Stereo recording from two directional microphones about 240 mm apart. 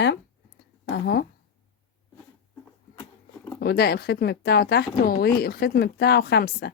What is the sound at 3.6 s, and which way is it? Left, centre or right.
Speech, left.